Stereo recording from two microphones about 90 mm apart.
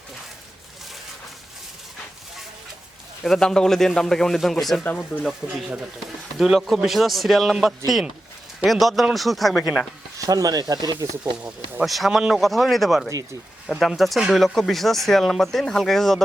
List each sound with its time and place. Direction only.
3.2 s speech: 5° left (ahead or behind)
10.2 s speech: 40° right (ahead or behind)
11.2 s speech: 15° right (ahead or behind)
11.9 s speech: centre (ahead or behind)